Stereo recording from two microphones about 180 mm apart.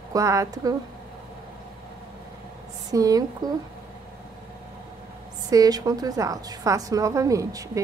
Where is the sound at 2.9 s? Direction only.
20° right (ahead or behind).